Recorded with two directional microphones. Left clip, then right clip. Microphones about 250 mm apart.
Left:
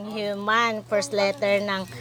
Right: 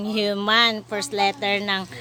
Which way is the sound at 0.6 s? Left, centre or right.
Right.